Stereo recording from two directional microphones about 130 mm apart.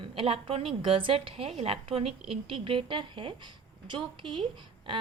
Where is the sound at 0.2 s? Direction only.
45° right (ahead or behind).